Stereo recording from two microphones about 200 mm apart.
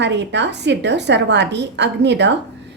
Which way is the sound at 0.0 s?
60° right (ahead or behind).